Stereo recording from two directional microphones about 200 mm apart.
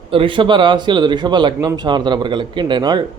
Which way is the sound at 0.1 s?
25° right (ahead or behind).